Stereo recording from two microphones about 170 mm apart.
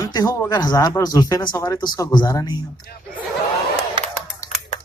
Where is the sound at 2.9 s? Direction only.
65° left (ahead or behind).